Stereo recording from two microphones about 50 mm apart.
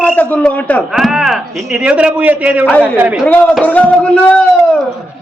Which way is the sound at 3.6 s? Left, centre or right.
Left.